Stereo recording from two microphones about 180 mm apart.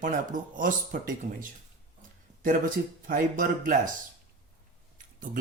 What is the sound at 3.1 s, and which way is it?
Speech, 50° right (ahead or behind).